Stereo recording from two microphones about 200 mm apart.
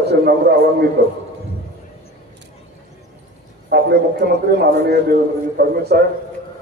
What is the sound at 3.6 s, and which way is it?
A man's voice, 55° right (ahead or behind).